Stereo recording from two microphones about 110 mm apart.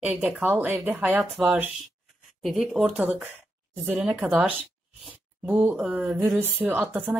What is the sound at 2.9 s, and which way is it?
Speech, 15° right (ahead or behind).